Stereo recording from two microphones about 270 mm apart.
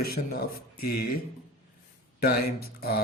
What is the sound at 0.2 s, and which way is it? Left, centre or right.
Speech, left.